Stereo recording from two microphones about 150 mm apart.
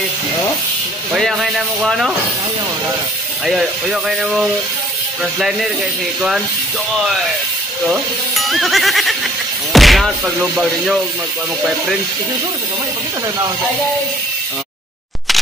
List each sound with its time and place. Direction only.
1.1 s speech: centre (ahead or behind)
3.4 s speech: 5° right (ahead or behind)
7.8 s speech: centre (ahead or behind)